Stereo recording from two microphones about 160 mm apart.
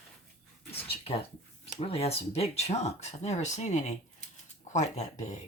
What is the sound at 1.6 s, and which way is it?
Speech, 40° left (ahead or behind).